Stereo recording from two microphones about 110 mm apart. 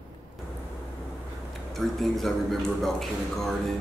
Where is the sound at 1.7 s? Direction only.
Centre (ahead or behind).